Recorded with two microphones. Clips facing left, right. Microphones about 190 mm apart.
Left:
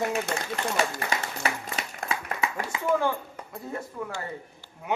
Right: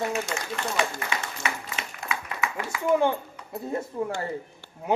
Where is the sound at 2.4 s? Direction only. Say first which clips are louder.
Even; 30° left (ahead or behind).